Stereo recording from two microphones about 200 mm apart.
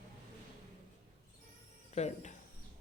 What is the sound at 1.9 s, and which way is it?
Music, 35° left (ahead or behind).